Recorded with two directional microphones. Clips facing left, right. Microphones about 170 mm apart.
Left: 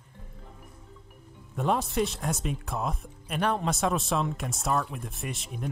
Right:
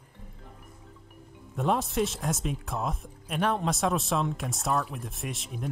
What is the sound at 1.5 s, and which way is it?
Speech, centre (ahead or behind).